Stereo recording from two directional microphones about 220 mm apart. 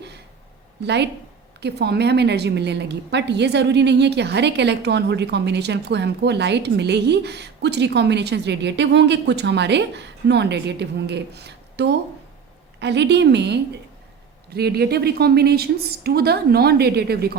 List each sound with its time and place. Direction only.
1.6 s a woman's voice: 50° right (ahead or behind)